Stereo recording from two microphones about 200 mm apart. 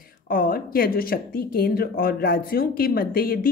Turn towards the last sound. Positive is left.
turn(degrees=45)  # may be behind; listen again after turning